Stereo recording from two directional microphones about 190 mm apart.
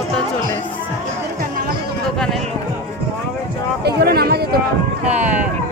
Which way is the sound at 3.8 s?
55° right (ahead or behind).